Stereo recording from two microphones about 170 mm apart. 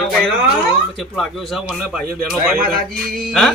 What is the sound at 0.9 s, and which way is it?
A man's voice, centre (ahead or behind).